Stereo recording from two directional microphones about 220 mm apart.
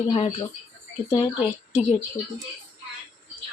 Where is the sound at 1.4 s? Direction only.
5° right (ahead or behind).